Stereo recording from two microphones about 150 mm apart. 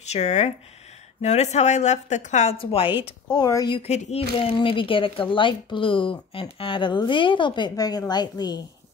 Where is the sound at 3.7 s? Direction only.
45° left (ahead or behind).